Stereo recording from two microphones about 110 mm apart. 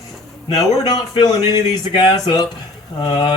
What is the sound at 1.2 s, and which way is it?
Speech, 40° left (ahead or behind).